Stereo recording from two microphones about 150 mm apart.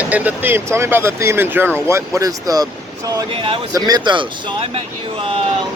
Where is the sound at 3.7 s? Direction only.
30° right (ahead or behind).